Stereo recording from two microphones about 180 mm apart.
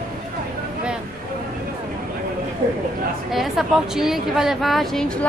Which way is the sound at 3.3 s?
Centre (ahead or behind).